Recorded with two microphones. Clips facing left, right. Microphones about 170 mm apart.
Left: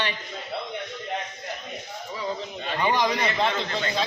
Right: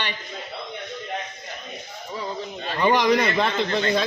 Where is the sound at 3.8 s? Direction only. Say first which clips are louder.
Right 5 dB; 55° right (ahead or behind).